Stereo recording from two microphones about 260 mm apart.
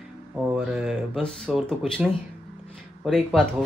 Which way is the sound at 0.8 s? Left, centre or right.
Centre.